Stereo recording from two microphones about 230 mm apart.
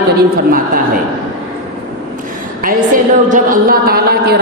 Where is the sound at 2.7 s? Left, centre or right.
Right.